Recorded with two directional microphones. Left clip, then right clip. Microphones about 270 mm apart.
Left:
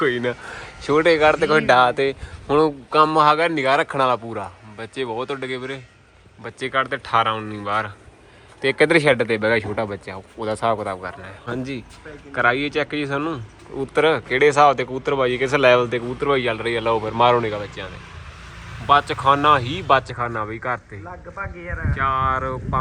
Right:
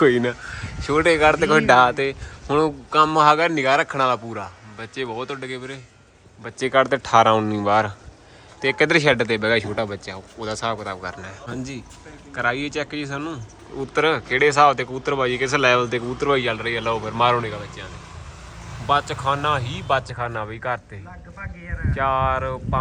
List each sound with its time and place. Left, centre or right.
0.0 s speech: centre
0.4 s speech: centre
21.9 s speech: right
22.4 s speech: centre